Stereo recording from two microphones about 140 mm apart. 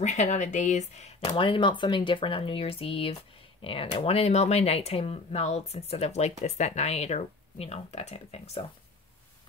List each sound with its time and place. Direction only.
0.0 s speech: 55° left (ahead or behind)
1.3 s speech: 35° left (ahead or behind)